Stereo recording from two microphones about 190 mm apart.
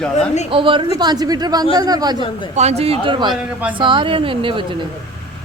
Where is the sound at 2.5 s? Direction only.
35° right (ahead or behind).